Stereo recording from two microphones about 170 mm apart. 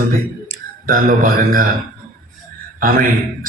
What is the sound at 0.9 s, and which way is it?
Speech, 55° right (ahead or behind).